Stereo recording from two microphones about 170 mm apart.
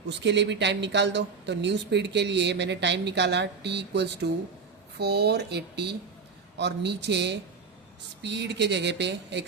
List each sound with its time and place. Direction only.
0.1 s speech: 90° right